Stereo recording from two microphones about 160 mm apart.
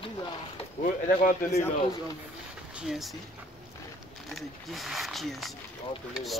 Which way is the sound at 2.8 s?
Centre (ahead or behind).